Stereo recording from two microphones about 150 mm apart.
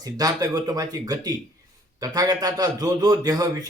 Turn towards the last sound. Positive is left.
turn(degrees=-25)  # may be behind; listen again after turning